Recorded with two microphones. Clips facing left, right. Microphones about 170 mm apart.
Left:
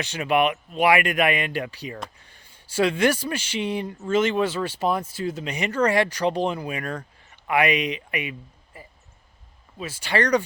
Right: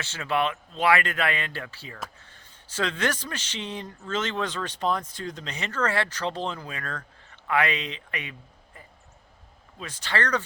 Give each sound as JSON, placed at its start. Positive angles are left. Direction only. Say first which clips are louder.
{"t": 0.0, "sound": "a man's voice", "louder": "left 5 dB", "side_deg": 15}